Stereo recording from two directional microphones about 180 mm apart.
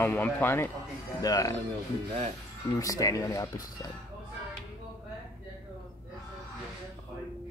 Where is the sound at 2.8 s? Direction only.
20° left (ahead or behind).